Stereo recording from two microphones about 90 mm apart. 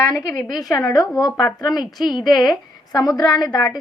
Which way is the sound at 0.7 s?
45° left (ahead or behind).